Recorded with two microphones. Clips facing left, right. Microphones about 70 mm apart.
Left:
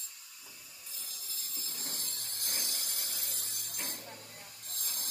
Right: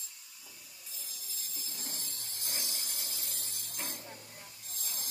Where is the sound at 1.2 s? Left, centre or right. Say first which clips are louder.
Even; left.